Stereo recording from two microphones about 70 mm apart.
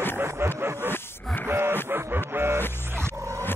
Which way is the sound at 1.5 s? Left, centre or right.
Right.